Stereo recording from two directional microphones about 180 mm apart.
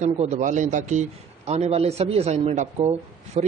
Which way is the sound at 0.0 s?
40° right (ahead or behind).